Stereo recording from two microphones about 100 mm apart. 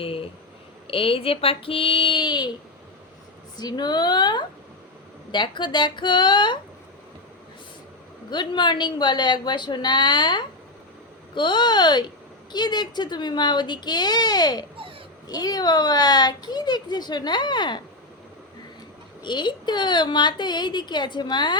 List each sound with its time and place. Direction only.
0.0 s speech: 65° left (ahead or behind)
0.9 s child singing: 65° left (ahead or behind); by 2.5 s 50° left (ahead or behind)
3.6 s speech: 45° left (ahead or behind)
8.3 s speech: 50° left (ahead or behind)
19.2 s speech: 50° left (ahead or behind)